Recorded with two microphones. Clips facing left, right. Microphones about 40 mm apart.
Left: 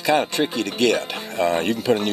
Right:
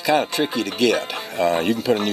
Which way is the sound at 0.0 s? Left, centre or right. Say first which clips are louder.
Even; centre.